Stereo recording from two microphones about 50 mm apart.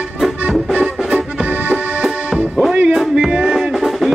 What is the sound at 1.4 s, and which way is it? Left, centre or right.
Accordion, right.